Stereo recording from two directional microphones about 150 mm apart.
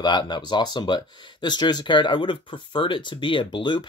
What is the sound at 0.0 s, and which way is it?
Speech, 30° left (ahead or behind).